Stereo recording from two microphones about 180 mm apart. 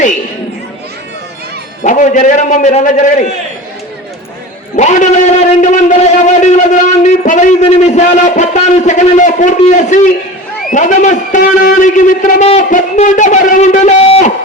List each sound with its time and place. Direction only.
1.8 s speech: 45° left (ahead or behind)
4.8 s a man's voice: 40° left (ahead or behind)